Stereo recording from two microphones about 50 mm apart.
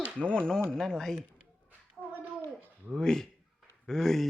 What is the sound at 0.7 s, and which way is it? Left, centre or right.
Speech, centre.